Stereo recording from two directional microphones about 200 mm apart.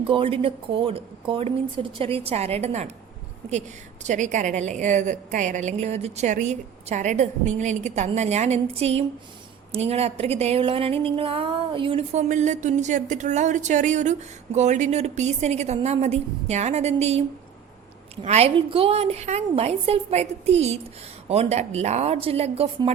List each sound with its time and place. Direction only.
0.0 s a woman's voice: 25° right (ahead or behind)
4.0 s speech: 35° right (ahead or behind)